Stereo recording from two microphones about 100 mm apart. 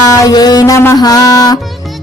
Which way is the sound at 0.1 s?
40° left (ahead or behind).